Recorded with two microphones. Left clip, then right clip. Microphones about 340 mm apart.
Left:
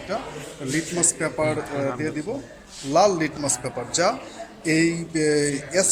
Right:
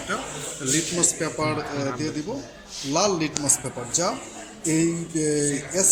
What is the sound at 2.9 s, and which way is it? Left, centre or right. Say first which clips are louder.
Speech: left 4 dB; left.